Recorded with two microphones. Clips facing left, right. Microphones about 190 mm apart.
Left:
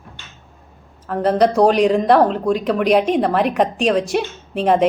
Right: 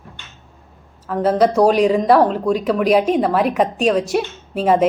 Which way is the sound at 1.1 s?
Centre (ahead or behind).